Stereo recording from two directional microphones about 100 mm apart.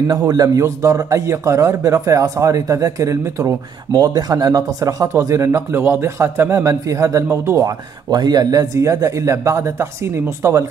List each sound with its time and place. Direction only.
0.1 s a man's voice: 40° right (ahead or behind)
7.6 s a man's voice: 45° right (ahead or behind); by 10.6 s 25° right (ahead or behind)